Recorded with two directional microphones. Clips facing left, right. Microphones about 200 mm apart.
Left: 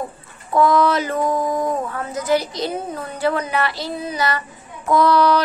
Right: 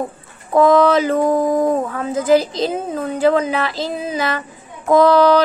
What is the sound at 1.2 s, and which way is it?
Speech, 50° right (ahead or behind).